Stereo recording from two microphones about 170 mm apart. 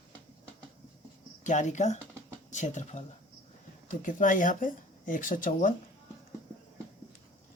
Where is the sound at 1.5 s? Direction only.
45° left (ahead or behind).